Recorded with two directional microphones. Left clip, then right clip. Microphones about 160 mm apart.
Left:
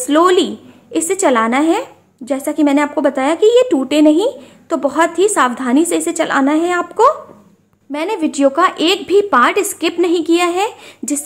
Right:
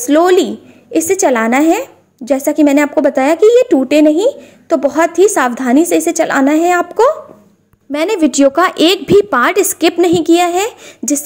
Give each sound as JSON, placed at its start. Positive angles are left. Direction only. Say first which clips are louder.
{"t": 0.0, "sound": "a woman's voice", "louder": "right 2 dB", "side_deg": -20}
{"t": 7.9, "sound": "a woman's voice", "louder": "right 5 dB", "side_deg": -30}